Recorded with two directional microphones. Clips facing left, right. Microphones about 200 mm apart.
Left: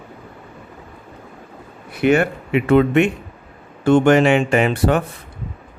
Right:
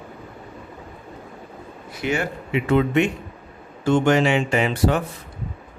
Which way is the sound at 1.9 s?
60° left (ahead or behind).